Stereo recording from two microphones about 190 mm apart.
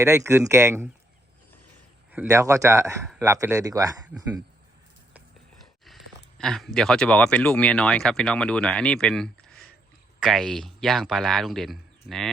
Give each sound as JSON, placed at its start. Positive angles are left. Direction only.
{"t": 0.0, "sound": "speech", "side_deg": -15}
{"t": 2.1, "sound": "speech", "side_deg": -15}
{"t": 5.8, "sound": "a sound", "side_deg": 0}
{"t": 6.7, "sound": "speech", "side_deg": 5}